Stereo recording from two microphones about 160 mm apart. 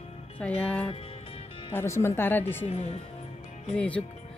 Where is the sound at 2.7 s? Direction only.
40° left (ahead or behind).